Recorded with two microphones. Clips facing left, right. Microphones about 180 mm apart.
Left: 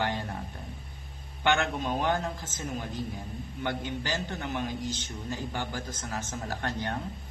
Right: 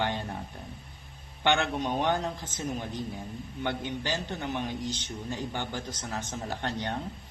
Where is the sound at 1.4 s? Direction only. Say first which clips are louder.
Even; 15° right (ahead or behind).